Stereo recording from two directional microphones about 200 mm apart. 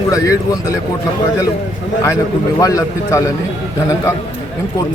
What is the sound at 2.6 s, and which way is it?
Speech, 15° left (ahead or behind).